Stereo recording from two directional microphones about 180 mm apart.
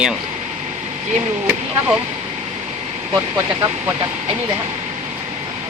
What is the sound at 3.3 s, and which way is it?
Speech, 20° right (ahead or behind).